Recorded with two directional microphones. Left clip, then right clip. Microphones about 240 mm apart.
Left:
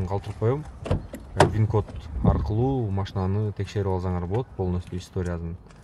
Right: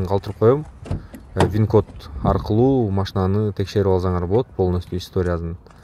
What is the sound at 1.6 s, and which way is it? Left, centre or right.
Speech, centre.